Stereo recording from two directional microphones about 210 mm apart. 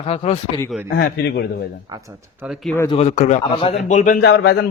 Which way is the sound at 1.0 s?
50° left (ahead or behind).